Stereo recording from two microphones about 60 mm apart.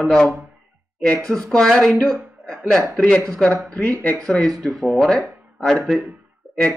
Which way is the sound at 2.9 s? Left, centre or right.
Left.